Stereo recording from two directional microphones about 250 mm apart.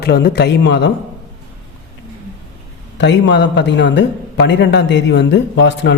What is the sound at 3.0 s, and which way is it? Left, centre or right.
A man's voice, left.